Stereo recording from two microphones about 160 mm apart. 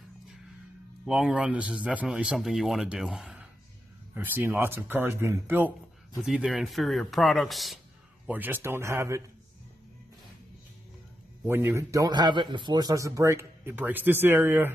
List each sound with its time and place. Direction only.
1.0 s a man's voice: 5° right (ahead or behind)
6.2 s speech: centre (ahead or behind)
8.3 s a man's voice: 10° right (ahead or behind)
11.4 s a man's voice: 15° right (ahead or behind)